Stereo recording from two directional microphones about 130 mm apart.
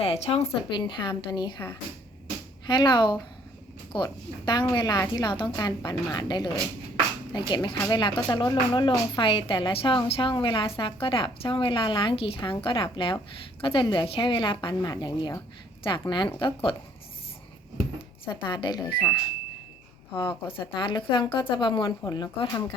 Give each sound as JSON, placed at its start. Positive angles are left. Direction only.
{"t": 0.0, "sound": "speech", "side_deg": 55}
{"t": 0.7, "sound": "speech", "side_deg": 35}
{"t": 2.6, "sound": "speech", "side_deg": 35}
{"t": 18.3, "sound": "speech", "side_deg": 40}
{"t": 20.1, "sound": "speech", "side_deg": 40}